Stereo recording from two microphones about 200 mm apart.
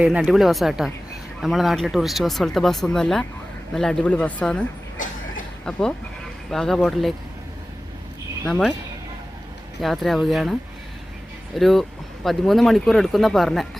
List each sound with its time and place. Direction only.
0.0 s speech: 5° right (ahead or behind)
5.0 s a sound: 40° left (ahead or behind)
5.7 s speech: 5° left (ahead or behind)
8.4 s speech: centre (ahead or behind)
9.8 s speech: centre (ahead or behind)